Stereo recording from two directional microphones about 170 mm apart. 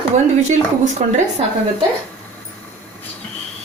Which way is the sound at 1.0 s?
45° right (ahead or behind).